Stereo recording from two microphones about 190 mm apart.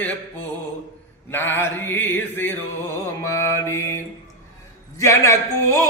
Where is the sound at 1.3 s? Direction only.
10° left (ahead or behind).